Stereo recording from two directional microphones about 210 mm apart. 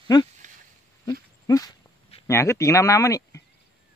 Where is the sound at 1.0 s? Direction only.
15° left (ahead or behind).